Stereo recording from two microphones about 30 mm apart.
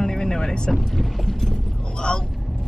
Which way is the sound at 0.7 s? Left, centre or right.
Centre.